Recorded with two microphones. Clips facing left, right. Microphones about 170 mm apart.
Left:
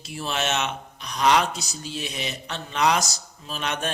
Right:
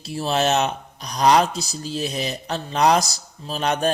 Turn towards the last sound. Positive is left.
turn(degrees=-35)  # may be behind; listen again after turning